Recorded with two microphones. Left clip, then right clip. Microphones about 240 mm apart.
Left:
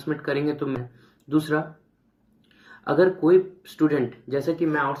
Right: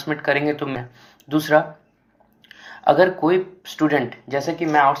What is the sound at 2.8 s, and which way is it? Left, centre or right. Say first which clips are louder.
Speech: right 6 dB; right.